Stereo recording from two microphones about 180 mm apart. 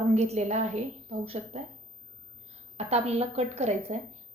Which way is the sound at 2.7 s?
35° right (ahead or behind).